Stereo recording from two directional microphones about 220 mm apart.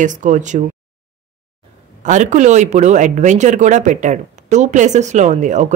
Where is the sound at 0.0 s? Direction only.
35° right (ahead or behind).